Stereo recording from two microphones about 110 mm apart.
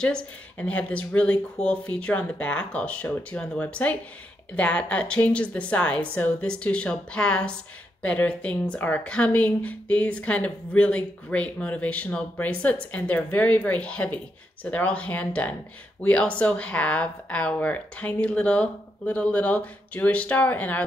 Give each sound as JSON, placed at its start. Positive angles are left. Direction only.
{"t": 0.0, "sound": "speech", "side_deg": 10}